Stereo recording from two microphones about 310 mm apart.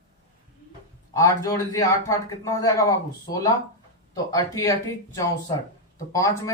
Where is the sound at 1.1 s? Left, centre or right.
Centre.